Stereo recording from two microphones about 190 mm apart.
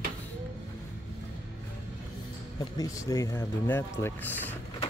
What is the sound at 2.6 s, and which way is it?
Speech, 15° left (ahead or behind).